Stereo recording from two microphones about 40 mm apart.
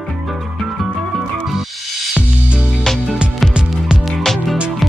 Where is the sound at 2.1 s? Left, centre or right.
Right.